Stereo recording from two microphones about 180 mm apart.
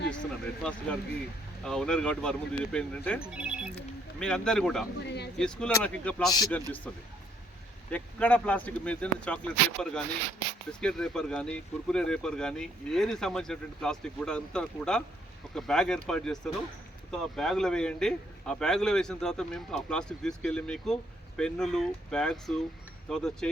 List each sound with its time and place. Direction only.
0.6 s speech: 5° left (ahead or behind)
3.2 s speech: 5° right (ahead or behind)
5.0 s a sound: 70° left (ahead or behind)
5.4 s speech: 5° left (ahead or behind)
6.2 s a man's voice: 20° left (ahead or behind)
6.9 s speech: 5° left (ahead or behind)